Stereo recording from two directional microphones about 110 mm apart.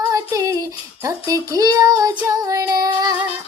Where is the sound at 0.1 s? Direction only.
30° right (ahead or behind).